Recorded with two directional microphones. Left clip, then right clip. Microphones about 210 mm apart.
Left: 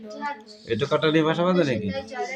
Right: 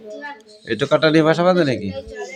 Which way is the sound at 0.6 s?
35° right (ahead or behind).